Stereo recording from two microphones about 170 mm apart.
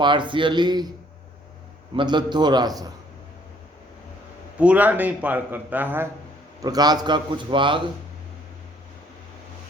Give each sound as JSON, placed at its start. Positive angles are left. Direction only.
{"t": 0.0, "sound": "a man's voice", "side_deg": -30}
{"t": 2.0, "sound": "a man's voice", "side_deg": -25}
{"t": 4.5, "sound": "a man's voice", "side_deg": -10}
{"t": 6.6, "sound": "a man's voice", "side_deg": -25}